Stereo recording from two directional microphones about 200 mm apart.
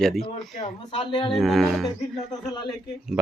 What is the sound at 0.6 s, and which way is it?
Speech, 25° left (ahead or behind).